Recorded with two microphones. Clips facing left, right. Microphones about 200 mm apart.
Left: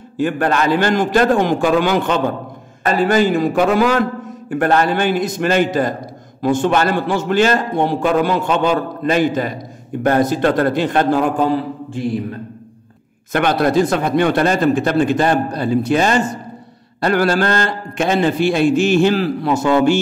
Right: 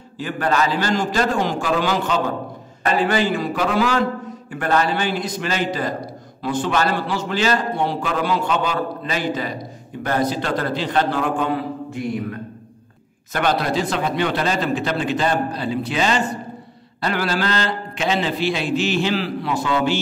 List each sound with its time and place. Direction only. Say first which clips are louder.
0.2 s a man's voice: left 4 dB; 55° left (ahead or behind)
2.8 s a man's voice: left 4 dB; 40° left (ahead or behind)
13.3 s a man's voice: left 5 dB; 55° left (ahead or behind)